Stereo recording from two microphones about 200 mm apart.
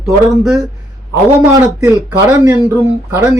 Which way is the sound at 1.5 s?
15° right (ahead or behind).